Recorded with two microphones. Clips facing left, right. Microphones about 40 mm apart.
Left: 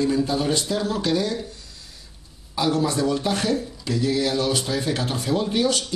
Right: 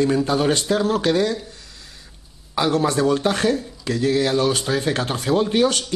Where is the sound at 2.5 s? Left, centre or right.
Right.